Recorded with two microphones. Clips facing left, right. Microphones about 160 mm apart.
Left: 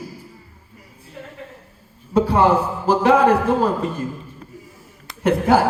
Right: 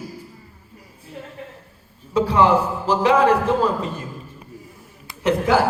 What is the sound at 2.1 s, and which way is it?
A man's voice, 55° left (ahead or behind).